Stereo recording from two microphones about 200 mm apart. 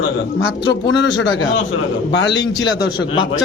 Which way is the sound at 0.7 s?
65° left (ahead or behind).